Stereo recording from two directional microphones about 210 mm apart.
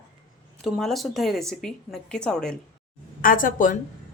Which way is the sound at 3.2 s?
40° left (ahead or behind).